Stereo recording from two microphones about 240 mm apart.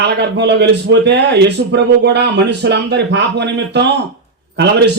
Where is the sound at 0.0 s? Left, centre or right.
Right.